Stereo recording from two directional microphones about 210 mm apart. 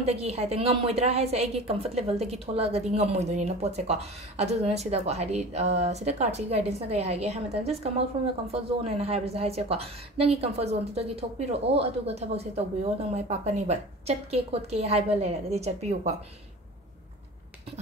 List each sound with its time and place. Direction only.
0.0 s a woman's voice: 30° right (ahead or behind)